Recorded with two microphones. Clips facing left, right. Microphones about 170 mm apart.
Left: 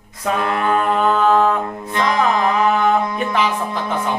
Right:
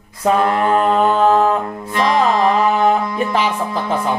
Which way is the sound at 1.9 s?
25° right (ahead or behind).